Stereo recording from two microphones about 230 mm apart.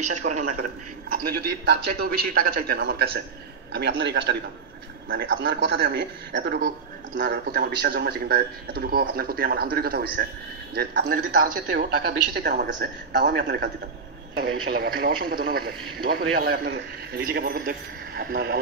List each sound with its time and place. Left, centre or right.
0.0 s a man's voice: right